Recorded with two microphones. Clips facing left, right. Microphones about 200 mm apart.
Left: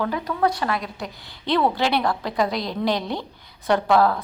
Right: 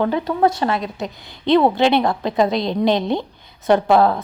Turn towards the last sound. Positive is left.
turn(degrees=-25)  # may be behind; listen again after turning